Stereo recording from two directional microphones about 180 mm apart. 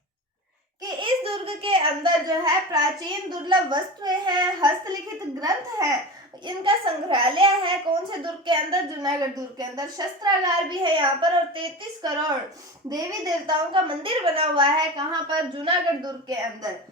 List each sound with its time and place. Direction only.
0.8 s a child's voice: 25° right (ahead or behind)
12.9 s a child's voice: 20° right (ahead or behind)